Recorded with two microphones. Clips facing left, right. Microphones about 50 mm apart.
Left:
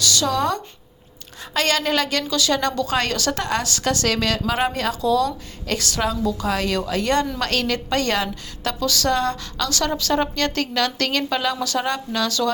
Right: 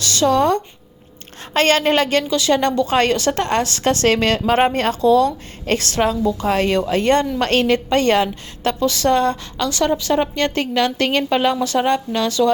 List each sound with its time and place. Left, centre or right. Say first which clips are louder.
0.0 s a woman's voice: right 5 dB; right